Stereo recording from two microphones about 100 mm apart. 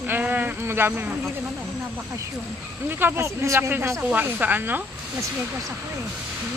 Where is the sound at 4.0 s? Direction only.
15° right (ahead or behind).